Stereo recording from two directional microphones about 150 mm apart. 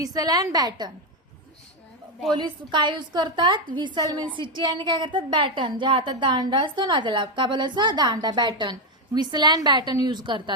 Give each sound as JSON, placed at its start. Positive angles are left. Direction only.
{"t": 0.0, "sound": "a woman's voice", "side_deg": -25}
{"t": 2.3, "sound": "a woman's voice", "side_deg": -30}